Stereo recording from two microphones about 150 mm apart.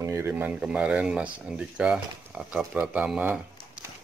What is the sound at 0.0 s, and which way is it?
Speech, 20° right (ahead or behind).